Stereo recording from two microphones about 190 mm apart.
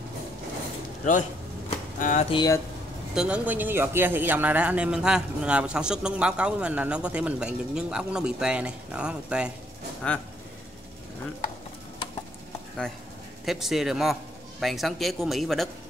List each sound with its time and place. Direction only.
2.0 s speech: 40° left (ahead or behind)
2.3 s speech: 20° left (ahead or behind)
3.2 s a man's voice: 10° right (ahead or behind)
13.5 s a man's voice: centre (ahead or behind)